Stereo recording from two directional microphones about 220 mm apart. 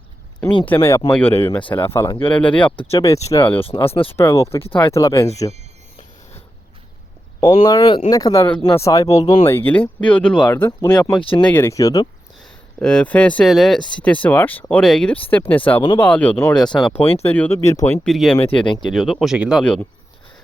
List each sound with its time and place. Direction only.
0.3 s speech: 20° left (ahead or behind)
2.7 s speech: 25° left (ahead or behind)
3.0 s speech: 15° left (ahead or behind)
7.4 s speech: 20° left (ahead or behind)
9.5 s speech: 10° left (ahead or behind)
11.2 s speech: 25° left (ahead or behind)
11.4 s speech: 10° left (ahead or behind)
12.8 s speech: 5° left (ahead or behind)
18.4 s speech: 20° left (ahead or behind)
18.9 s speech: centre (ahead or behind)